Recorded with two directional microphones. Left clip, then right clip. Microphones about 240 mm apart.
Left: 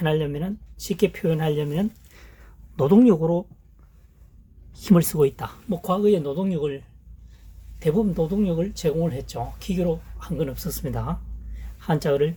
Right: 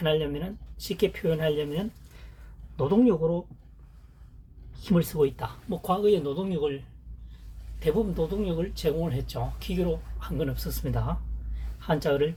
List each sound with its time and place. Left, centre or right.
0.0 s speech: left
4.7 s speech: left
7.8 s speech: left